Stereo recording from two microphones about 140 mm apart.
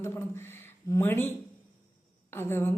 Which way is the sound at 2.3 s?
15° left (ahead or behind).